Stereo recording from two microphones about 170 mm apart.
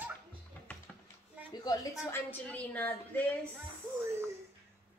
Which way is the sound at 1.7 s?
10° left (ahead or behind).